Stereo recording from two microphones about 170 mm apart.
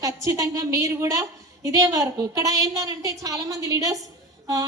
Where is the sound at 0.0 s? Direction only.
20° right (ahead or behind).